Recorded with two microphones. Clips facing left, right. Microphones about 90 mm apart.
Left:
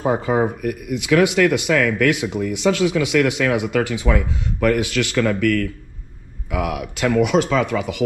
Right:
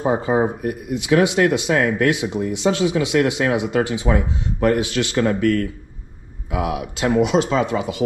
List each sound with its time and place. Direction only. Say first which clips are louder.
0.0 s speech: even; 20° right (ahead or behind)